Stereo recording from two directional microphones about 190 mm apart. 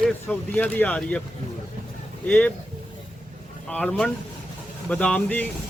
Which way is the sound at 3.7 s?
5° left (ahead or behind).